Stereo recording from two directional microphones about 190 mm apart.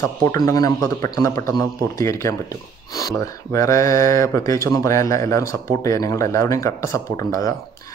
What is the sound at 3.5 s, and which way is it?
Mantra, 15° left (ahead or behind).